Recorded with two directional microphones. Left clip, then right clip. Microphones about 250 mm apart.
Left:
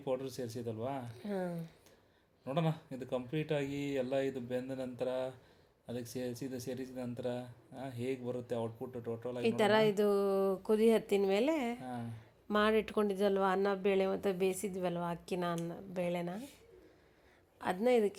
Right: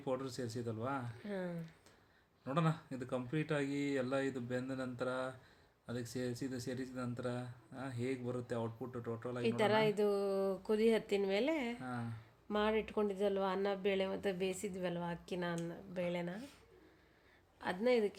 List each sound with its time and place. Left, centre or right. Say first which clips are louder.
0.0 s speech: left 3 dB; centre
1.1 s speech: left 4 dB; centre
2.5 s speech: left 1 dB; centre
9.4 s speech: left 4 dB; centre
11.8 s speech: left 1 dB; centre
12.5 s speech: left 5 dB; centre
17.6 s speech: left 3 dB; centre